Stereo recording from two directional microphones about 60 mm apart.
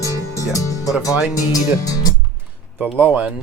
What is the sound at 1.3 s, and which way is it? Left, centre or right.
Speech, left.